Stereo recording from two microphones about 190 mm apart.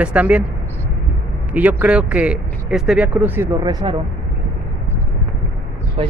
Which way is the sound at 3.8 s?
25° right (ahead or behind).